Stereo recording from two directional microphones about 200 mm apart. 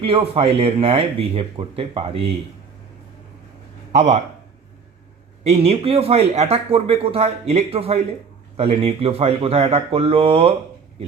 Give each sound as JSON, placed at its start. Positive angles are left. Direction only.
{"t": 0.0, "sound": "speech", "side_deg": -30}
{"t": 3.9, "sound": "speech", "side_deg": -35}
{"t": 5.4, "sound": "speech", "side_deg": -30}